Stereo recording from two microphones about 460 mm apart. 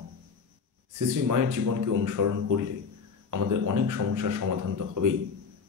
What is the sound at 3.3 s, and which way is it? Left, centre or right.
Speech, right.